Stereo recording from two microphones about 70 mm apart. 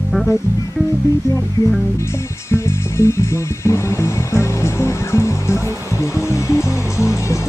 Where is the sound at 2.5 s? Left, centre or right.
Left.